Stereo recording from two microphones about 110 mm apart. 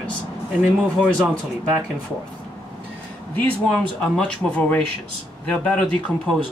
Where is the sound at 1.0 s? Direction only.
5° right (ahead or behind).